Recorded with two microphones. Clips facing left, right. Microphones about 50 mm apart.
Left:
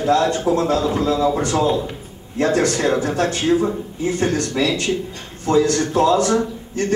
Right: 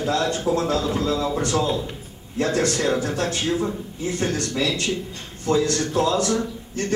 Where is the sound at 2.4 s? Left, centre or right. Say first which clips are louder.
Left 4 dB; left.